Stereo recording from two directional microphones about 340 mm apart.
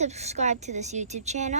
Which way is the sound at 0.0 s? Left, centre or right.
Centre.